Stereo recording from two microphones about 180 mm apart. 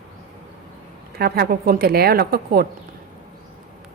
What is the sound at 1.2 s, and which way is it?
A woman's voice, 60° right (ahead or behind).